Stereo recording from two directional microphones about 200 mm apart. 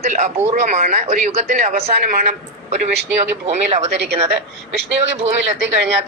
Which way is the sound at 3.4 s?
35° right (ahead or behind).